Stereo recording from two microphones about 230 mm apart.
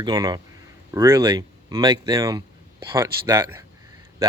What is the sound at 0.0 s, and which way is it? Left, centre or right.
Speech, centre.